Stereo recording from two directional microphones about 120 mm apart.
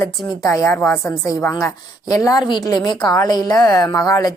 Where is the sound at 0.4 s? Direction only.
25° left (ahead or behind).